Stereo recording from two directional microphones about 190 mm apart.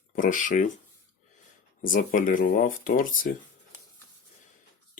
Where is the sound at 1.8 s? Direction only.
45° left (ahead or behind).